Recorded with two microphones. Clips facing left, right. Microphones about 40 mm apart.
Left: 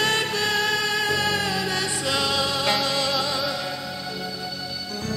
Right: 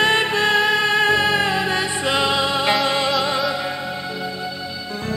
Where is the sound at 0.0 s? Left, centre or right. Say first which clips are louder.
Right 6 dB; right.